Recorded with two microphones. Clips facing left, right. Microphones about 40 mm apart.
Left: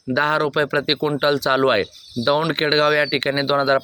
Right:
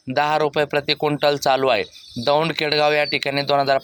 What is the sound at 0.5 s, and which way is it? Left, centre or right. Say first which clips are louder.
Speech: left 1 dB; centre.